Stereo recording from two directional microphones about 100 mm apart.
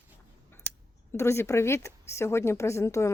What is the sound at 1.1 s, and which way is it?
Speech, 25° left (ahead or behind).